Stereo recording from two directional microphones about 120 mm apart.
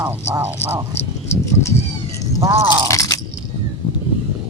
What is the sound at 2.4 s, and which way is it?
Speech, 20° right (ahead or behind).